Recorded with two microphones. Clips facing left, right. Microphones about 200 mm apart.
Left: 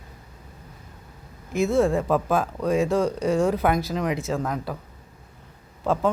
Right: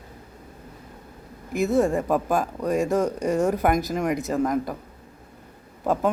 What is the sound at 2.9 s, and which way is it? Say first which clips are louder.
Speech: even; 20° right (ahead or behind).